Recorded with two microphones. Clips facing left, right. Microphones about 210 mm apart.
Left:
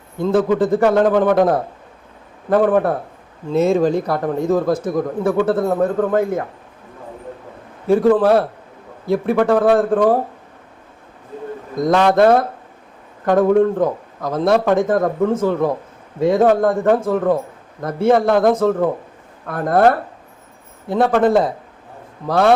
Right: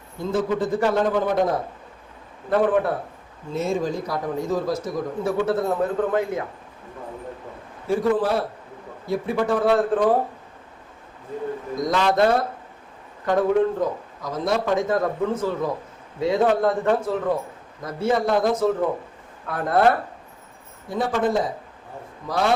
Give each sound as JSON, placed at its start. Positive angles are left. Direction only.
{"t": 0.2, "sound": "a man's voice", "side_deg": 65}
{"t": 3.5, "sound": "a man's voice", "side_deg": 70}
{"t": 7.9, "sound": "a man's voice", "side_deg": 60}
{"t": 11.8, "sound": "a man's voice", "side_deg": 55}
{"t": 20.9, "sound": "a man's voice", "side_deg": 60}